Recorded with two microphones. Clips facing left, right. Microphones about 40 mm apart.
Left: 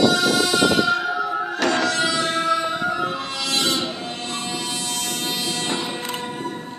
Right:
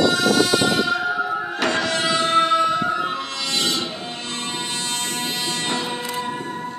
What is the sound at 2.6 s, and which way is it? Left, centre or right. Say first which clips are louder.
Music: right 3 dB; centre.